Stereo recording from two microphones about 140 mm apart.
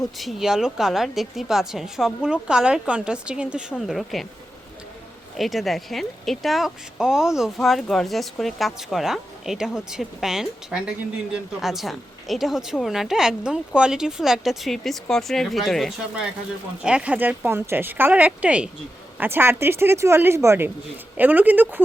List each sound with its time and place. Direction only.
0.2 s speech: centre (ahead or behind)
5.4 s speech: centre (ahead or behind)